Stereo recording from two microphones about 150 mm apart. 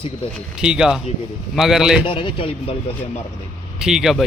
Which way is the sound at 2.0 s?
35° left (ahead or behind).